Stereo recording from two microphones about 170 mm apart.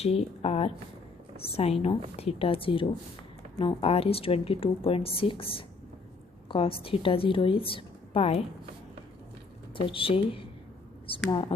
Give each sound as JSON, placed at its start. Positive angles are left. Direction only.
{"t": 0.0, "sound": "a woman's voice", "side_deg": 35}
{"t": 9.7, "sound": "a woman's voice", "side_deg": 30}